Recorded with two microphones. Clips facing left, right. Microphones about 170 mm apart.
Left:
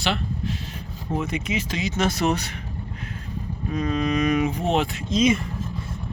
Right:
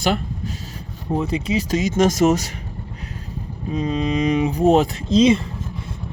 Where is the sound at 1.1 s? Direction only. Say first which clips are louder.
Right 5 dB; 35° right (ahead or behind).